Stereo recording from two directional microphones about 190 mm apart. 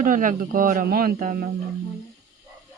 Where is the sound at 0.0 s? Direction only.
45° right (ahead or behind).